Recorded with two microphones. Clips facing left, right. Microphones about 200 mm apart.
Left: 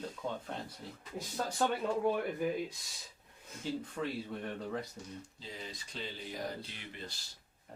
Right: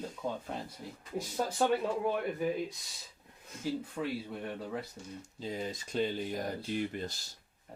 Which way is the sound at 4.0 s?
5° right (ahead or behind).